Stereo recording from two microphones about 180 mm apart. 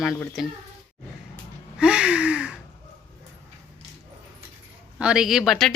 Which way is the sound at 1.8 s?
5° right (ahead or behind).